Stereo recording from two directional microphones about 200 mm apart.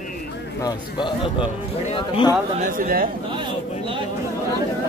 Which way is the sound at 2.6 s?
45° right (ahead or behind).